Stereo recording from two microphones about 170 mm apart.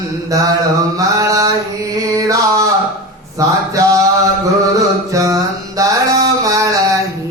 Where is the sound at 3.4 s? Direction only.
20° right (ahead or behind).